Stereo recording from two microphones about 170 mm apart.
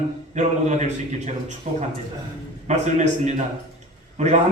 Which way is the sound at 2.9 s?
45° right (ahead or behind).